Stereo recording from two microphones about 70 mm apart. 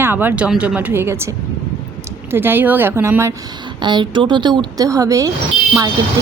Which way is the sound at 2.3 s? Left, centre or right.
Right.